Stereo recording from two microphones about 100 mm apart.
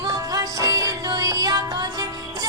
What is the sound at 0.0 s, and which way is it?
Music, 35° right (ahead or behind).